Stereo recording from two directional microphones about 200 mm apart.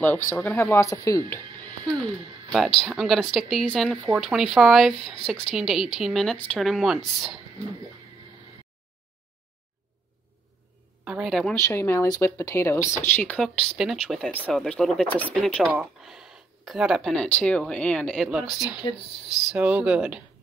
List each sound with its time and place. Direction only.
0.0 s speech: 10° left (ahead or behind)
1.3 s music: 10° left (ahead or behind)
2.8 s speech: centre (ahead or behind)
11.1 s speech: 5° right (ahead or behind)
11.5 s speech: 15° left (ahead or behind); by 20.2 s 5° right (ahead or behind)